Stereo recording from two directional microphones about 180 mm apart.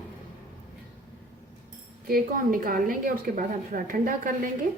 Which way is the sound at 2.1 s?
50° right (ahead or behind).